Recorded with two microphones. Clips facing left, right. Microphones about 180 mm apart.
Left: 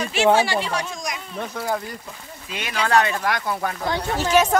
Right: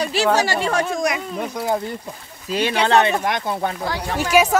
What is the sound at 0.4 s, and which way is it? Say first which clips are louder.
Speech: right 2 dB; 45° right (ahead or behind).